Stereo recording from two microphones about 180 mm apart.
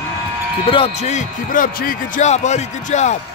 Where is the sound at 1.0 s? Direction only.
45° left (ahead or behind).